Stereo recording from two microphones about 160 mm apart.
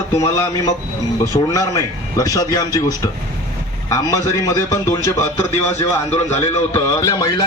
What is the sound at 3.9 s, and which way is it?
A man's voice, 20° left (ahead or behind).